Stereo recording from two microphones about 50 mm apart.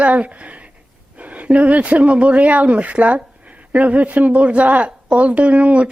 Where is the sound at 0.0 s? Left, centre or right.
Right.